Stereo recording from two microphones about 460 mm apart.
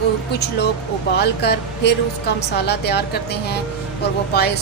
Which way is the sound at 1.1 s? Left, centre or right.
Left.